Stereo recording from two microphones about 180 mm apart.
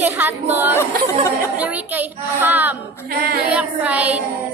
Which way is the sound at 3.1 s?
60° right (ahead or behind).